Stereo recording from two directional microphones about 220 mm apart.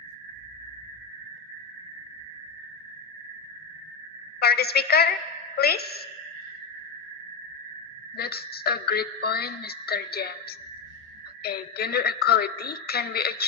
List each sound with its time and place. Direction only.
4.4 s a woman's voice: 45° left (ahead or behind)
8.1 s a woman's voice: 45° left (ahead or behind)